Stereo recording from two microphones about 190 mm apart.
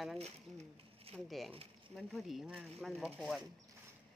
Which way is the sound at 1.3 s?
Centre (ahead or behind).